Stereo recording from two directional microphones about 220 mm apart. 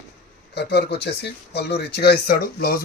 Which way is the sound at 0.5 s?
50° left (ahead or behind).